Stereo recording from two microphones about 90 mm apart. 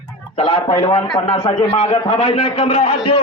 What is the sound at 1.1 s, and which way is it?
A man's voice, 65° left (ahead or behind).